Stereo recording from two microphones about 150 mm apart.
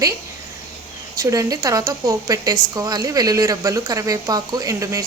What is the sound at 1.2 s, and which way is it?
Speech, 20° right (ahead or behind).